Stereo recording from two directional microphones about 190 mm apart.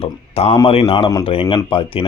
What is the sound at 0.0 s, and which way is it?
Speech, 30° left (ahead or behind).